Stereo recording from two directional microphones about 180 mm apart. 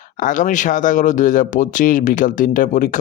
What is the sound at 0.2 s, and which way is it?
Speech, 45° left (ahead or behind).